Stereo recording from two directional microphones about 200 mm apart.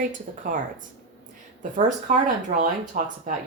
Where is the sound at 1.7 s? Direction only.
40° right (ahead or behind).